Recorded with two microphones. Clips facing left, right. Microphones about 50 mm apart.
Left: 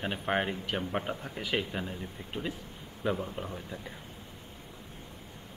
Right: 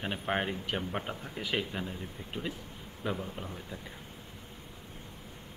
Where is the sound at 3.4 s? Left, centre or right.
Centre.